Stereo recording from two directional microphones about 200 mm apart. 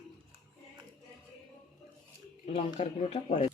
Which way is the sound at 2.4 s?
35° left (ahead or behind).